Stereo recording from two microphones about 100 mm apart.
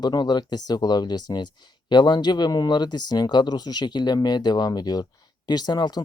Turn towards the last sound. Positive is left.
turn(degrees=45)  # may be behind; listen again after turning